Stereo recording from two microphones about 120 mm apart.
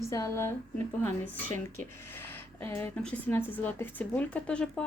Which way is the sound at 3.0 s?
10° left (ahead or behind).